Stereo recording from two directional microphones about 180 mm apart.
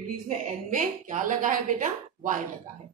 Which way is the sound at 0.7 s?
45° right (ahead or behind).